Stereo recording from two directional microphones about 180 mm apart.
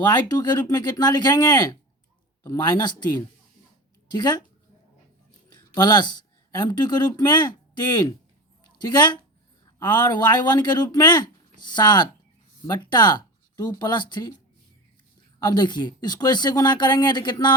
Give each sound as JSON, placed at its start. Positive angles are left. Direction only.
{"t": 0.0, "sound": "speech", "side_deg": 20}
{"t": 5.5, "sound": "speech", "side_deg": 20}
{"t": 8.8, "sound": "speech", "side_deg": 25}
{"t": 15.4, "sound": "speech", "side_deg": 25}